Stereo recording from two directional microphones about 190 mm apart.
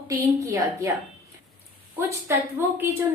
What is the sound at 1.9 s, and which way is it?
Speech, 10° right (ahead or behind).